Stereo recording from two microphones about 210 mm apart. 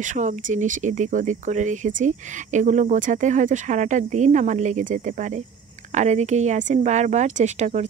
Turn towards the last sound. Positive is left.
turn(degrees=-35)  # may be behind; listen again after turning